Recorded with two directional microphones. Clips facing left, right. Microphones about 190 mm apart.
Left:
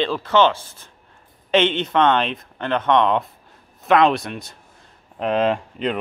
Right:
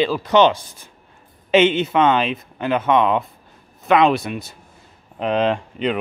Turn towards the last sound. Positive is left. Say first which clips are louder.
# right 2 dB
turn(degrees=0)  # may be behind; listen again after turning